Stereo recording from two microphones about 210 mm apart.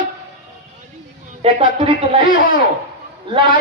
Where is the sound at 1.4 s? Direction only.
25° right (ahead or behind).